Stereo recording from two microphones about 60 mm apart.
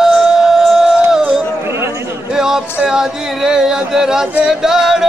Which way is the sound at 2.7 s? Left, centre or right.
Centre.